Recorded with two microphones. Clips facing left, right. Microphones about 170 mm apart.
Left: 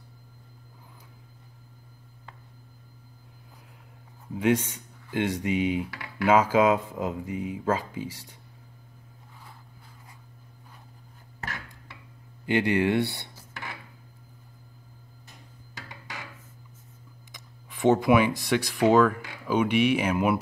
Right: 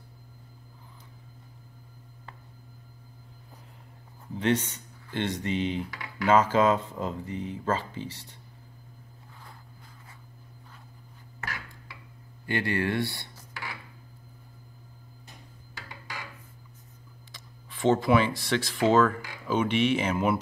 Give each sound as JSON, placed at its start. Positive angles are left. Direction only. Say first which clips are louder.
{"t": 4.3, "sound": "speech", "louder": "left 2 dB", "side_deg": 10}
{"t": 12.4, "sound": "speech", "louder": "left 5 dB", "side_deg": 15}
{"t": 17.3, "sound": "speech", "louder": "even", "side_deg": 15}